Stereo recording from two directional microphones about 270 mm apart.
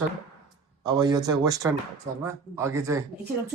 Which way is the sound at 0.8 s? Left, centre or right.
Centre.